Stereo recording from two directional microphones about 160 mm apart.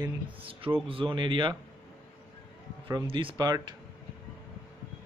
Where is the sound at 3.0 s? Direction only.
35° right (ahead or behind).